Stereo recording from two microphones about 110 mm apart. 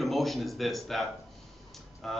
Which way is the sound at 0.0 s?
Centre (ahead or behind).